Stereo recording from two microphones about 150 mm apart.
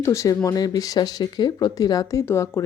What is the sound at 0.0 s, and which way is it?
Speech, 20° left (ahead or behind).